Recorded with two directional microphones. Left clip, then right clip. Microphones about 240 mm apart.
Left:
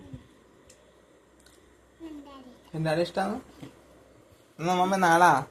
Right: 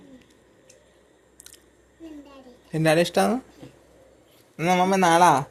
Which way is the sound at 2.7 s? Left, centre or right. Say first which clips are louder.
Right 8 dB; right.